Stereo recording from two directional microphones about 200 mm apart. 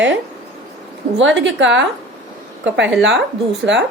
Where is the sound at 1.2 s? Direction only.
70° right (ahead or behind).